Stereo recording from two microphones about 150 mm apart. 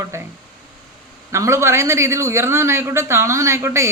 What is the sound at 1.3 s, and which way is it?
A man's voice, 20° right (ahead or behind).